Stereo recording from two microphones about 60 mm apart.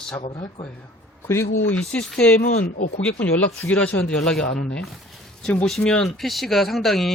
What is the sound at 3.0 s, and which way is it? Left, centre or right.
Speech, left.